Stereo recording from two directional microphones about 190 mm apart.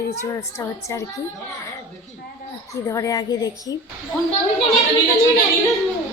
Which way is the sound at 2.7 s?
15° left (ahead or behind).